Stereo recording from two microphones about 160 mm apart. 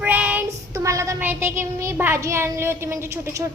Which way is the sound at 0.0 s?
10° right (ahead or behind).